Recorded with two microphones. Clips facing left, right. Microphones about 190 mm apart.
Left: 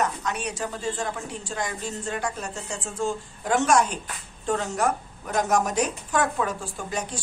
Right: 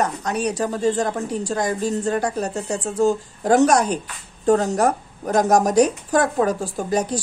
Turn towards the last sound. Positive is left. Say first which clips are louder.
# right 9 dB
turn(degrees=-40)  # may be behind; listen again after turning